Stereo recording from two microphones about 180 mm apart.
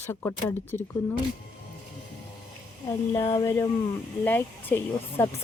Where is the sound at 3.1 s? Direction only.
20° left (ahead or behind).